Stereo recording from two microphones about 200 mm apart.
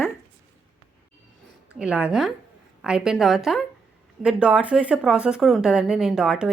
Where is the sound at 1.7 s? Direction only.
5° right (ahead or behind).